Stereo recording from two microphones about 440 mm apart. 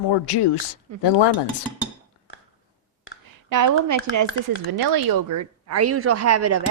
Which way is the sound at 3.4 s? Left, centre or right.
Right.